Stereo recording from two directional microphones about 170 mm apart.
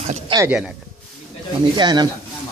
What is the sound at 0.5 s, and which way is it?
Speech, 5° right (ahead or behind).